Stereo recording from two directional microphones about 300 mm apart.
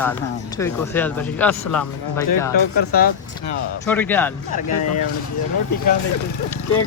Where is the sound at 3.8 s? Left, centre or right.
Centre.